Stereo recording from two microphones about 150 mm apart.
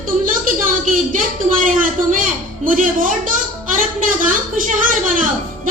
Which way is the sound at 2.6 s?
60° right (ahead or behind).